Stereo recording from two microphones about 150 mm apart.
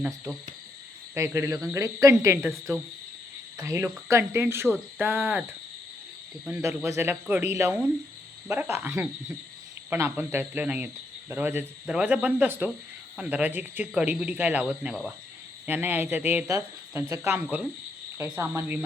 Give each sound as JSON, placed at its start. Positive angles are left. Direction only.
{"t": 1.1, "sound": "speech", "side_deg": -20}
{"t": 3.6, "sound": "speech", "side_deg": -20}
{"t": 6.9, "sound": "speech", "side_deg": -15}